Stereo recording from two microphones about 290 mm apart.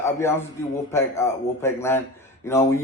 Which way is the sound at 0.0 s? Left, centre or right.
Centre.